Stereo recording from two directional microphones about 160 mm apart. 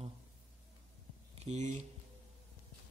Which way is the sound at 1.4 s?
45° right (ahead or behind).